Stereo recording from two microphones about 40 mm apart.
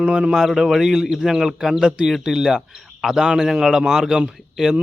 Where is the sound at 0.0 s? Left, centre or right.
Right.